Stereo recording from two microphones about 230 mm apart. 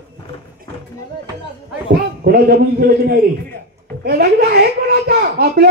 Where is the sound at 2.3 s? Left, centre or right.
Right.